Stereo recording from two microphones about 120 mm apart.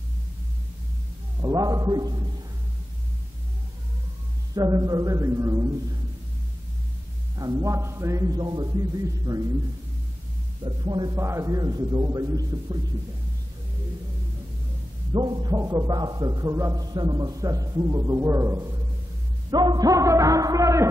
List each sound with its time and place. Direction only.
1.4 s a man's voice: 30° right (ahead or behind)
4.6 s a man's voice: 30° right (ahead or behind)
7.3 s a man's voice: 30° right (ahead or behind)
10.6 s a man's voice: 40° right (ahead or behind)
11.1 s a man's voice: 25° right (ahead or behind)
15.1 s a man's voice: 35° right (ahead or behind)
19.5 s a man's voice: 35° right (ahead or behind)